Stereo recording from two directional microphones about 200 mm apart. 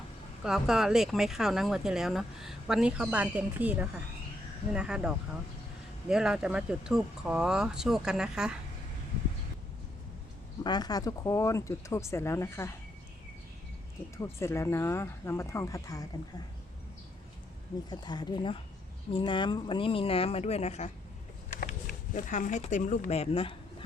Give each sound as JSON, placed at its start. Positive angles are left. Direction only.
{"t": 0.4, "sound": "speech", "side_deg": 0}
{"t": 10.6, "sound": "speech", "side_deg": 20}
{"t": 14.2, "sound": "speech", "side_deg": 15}
{"t": 17.8, "sound": "speech", "side_deg": 20}